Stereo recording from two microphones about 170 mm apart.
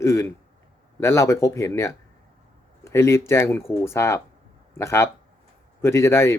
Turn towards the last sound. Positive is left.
turn(degrees=15)  # may be behind; listen again after turning